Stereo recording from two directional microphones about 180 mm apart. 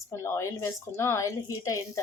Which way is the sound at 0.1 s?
15° left (ahead or behind).